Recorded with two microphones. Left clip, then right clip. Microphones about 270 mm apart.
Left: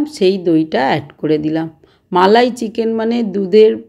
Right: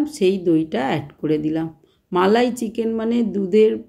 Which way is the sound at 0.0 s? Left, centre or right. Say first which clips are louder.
Left 5 dB; centre.